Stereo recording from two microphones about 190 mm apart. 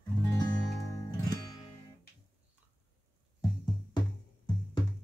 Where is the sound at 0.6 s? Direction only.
15° left (ahead or behind).